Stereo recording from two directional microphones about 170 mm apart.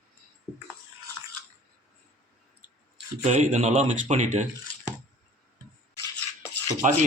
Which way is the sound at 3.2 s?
40° right (ahead or behind).